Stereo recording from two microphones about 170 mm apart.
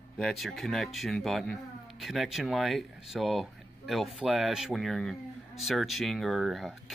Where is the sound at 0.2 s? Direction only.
Centre (ahead or behind).